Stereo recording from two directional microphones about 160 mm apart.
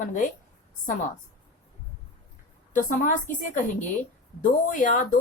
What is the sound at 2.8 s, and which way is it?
Speech, 55° left (ahead or behind).